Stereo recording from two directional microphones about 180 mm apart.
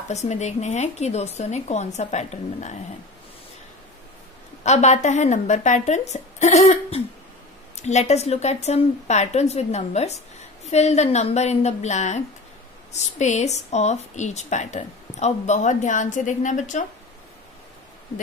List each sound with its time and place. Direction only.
0.1 s a woman's voice: 40° left (ahead or behind)
4.6 s a woman's voice: 40° left (ahead or behind)